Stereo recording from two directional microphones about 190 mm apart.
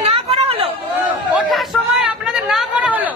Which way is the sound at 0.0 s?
30° right (ahead or behind).